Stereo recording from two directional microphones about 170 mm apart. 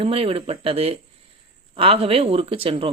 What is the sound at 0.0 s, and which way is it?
Speech, 35° right (ahead or behind).